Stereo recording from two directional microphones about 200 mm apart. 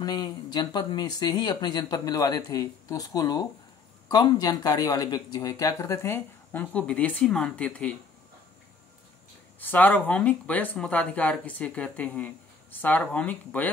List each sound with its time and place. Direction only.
0.0 s speech: 20° left (ahead or behind)
9.6 s speech: 10° left (ahead or behind)